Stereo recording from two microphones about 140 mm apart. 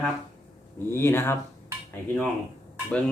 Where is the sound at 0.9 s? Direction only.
15° left (ahead or behind).